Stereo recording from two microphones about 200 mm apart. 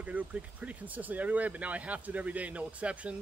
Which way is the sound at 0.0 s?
5° right (ahead or behind).